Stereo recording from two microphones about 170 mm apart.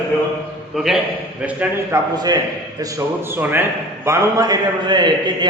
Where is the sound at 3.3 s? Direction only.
10° right (ahead or behind).